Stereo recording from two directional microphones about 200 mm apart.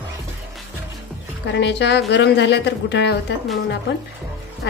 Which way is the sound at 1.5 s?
60° left (ahead or behind).